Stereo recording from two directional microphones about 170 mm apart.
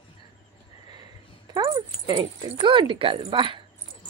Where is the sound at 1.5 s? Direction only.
25° right (ahead or behind).